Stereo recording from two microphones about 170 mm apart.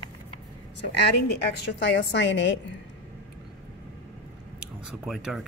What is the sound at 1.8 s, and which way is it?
Speech, 90° left.